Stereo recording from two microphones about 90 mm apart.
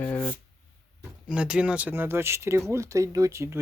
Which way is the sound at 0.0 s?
25° left (ahead or behind).